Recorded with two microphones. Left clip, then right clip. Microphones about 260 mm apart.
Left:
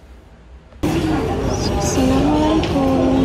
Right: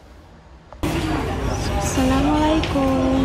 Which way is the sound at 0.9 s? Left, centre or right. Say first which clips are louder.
Left 5 dB; centre.